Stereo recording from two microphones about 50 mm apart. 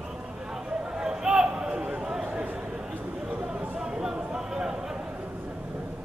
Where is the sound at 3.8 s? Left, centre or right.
Centre.